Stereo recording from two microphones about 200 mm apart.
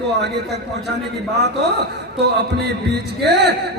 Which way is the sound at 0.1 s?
55° right (ahead or behind).